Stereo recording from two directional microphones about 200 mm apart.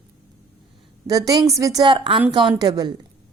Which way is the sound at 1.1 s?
20° right (ahead or behind).